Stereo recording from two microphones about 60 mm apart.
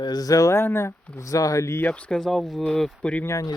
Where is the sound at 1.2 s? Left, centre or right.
Left.